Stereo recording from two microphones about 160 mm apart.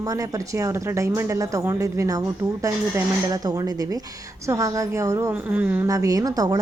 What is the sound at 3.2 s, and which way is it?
A woman's voice, 25° right (ahead or behind).